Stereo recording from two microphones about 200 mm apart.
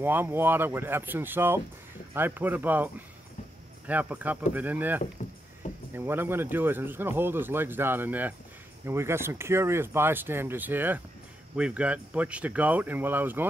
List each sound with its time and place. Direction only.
0.0 s a man's voice: 10° right (ahead or behind)
5.6 s a sound: 40° left (ahead or behind)
5.9 s a man's voice: 10° right (ahead or behind)